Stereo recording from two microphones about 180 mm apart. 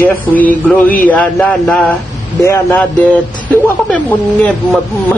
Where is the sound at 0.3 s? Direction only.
10° left (ahead or behind).